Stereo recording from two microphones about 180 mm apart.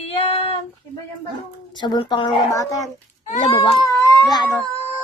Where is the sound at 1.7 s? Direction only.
25° left (ahead or behind).